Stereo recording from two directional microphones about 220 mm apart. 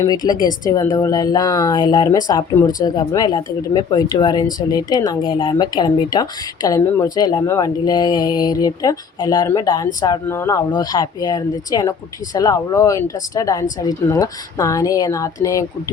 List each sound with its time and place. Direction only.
0.0 s speech: 20° left (ahead or behind)
0.3 s a woman's voice: 20° right (ahead or behind)
0.7 s speech: 15° left (ahead or behind)